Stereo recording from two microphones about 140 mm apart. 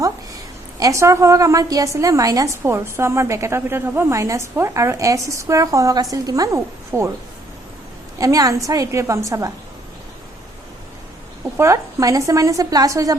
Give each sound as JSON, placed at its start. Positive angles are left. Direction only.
{"t": 0.8, "sound": "a woman's voice", "side_deg": -20}
{"t": 8.2, "sound": "a woman's voice", "side_deg": -25}
{"t": 11.5, "sound": "a woman's voice", "side_deg": -20}